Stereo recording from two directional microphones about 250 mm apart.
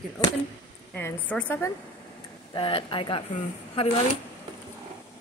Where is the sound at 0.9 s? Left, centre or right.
Centre.